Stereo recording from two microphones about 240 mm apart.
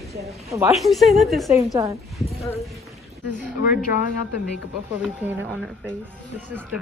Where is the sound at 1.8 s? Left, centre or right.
Centre.